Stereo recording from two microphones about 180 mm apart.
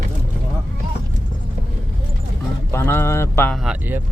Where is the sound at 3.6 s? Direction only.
10° right (ahead or behind).